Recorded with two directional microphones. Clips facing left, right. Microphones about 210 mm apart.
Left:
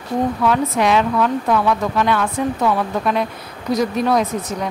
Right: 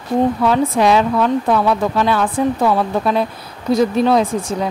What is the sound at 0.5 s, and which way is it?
A woman's voice, 35° right (ahead or behind).